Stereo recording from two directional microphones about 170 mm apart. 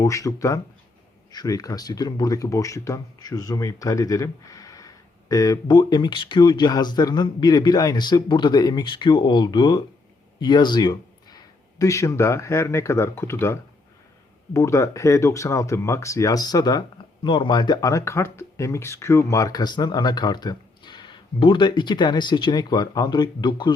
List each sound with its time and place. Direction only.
0.0 s speech: 20° left (ahead or behind)